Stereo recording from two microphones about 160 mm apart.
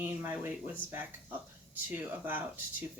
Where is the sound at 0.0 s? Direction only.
15° right (ahead or behind).